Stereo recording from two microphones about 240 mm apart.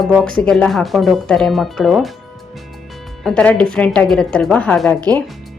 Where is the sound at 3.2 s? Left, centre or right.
Centre.